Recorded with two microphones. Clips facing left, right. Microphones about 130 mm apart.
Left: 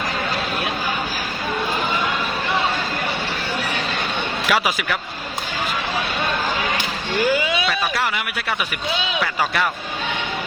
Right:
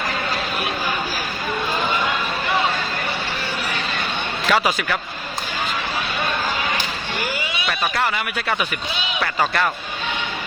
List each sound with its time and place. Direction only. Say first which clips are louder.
4.4 s a man's voice: right 2 dB; 5° left (ahead or behind)
9.2 s speech: right 3 dB; 5° left (ahead or behind)